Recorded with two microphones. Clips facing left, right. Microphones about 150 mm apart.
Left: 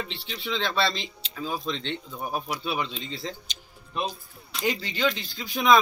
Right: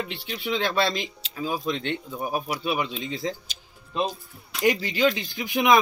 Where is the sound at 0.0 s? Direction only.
10° right (ahead or behind).